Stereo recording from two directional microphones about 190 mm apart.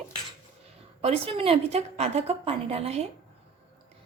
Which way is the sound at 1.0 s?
30° right (ahead or behind).